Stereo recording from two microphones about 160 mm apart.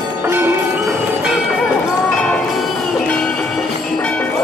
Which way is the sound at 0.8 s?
5° right (ahead or behind).